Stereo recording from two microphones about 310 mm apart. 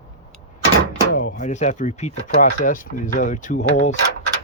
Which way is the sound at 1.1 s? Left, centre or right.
Left.